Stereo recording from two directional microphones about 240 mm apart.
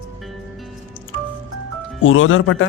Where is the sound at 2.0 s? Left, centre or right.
Left.